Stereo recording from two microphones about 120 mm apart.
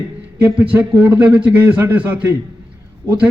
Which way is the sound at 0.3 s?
15° right (ahead or behind).